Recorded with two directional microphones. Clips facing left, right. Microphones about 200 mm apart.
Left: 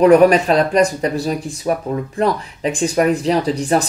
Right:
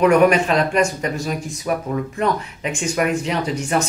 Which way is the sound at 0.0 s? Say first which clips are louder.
Left 4 dB; 35° left (ahead or behind).